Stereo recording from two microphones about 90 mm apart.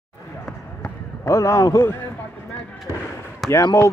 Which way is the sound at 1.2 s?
35° left (ahead or behind).